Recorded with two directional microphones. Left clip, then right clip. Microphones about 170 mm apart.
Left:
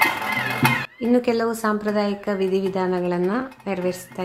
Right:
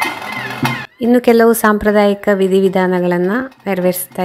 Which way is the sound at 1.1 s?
40° right (ahead or behind).